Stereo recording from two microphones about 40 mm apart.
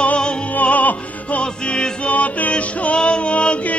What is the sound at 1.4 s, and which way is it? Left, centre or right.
Music, left.